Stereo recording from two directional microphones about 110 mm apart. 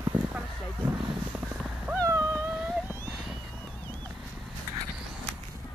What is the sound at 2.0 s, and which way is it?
Dog, 25° right (ahead or behind).